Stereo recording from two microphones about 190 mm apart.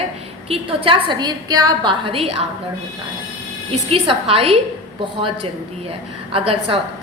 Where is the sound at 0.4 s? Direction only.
30° right (ahead or behind).